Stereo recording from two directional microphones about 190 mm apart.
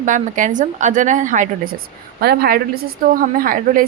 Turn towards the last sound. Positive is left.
turn(degrees=-50)  # may be behind; listen again after turning